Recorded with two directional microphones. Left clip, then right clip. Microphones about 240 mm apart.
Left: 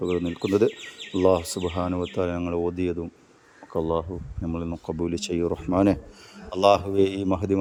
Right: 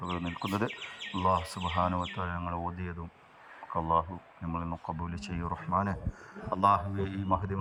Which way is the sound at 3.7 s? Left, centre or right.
Left.